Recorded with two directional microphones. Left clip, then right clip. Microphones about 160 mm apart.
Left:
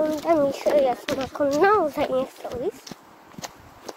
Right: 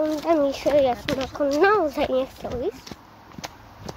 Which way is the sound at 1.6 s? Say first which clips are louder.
Even; 5° left (ahead or behind).